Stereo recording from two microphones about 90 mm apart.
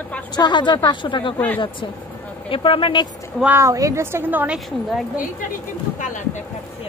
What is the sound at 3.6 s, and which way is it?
Speech, 35° right (ahead or behind).